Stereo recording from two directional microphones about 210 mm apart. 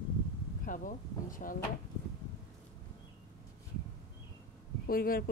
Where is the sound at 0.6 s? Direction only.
40° left (ahead or behind).